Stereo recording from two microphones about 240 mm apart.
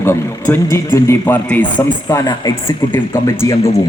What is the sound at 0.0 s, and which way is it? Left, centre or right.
A man's voice, centre.